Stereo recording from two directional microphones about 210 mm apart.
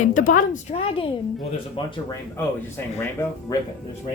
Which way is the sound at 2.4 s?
10° left (ahead or behind).